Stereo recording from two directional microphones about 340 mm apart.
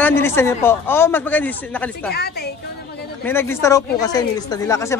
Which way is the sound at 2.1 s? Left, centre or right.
Left.